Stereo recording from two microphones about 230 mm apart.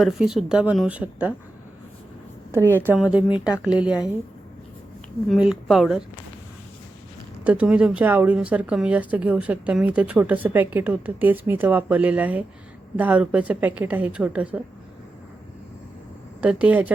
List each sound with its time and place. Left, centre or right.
0.0 s a woman's voice: centre
2.5 s speech: centre
3.2 s speech: centre
3.6 s a woman's voice: centre
5.3 s a woman's voice: centre
7.4 s a woman's voice: centre
16.4 s a woman's voice: centre